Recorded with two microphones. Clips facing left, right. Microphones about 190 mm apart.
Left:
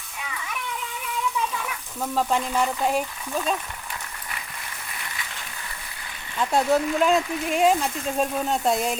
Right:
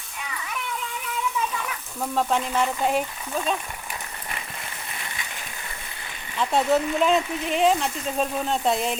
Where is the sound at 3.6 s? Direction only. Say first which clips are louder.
Right 1 dB; 15° right (ahead or behind).